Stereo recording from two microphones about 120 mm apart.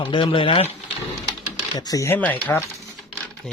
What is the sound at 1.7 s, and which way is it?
Speech, 35° left (ahead or behind).